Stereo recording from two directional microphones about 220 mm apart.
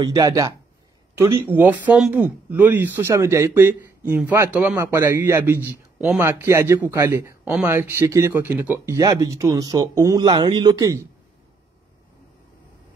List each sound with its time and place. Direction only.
0.0 s speech: 15° right (ahead or behind)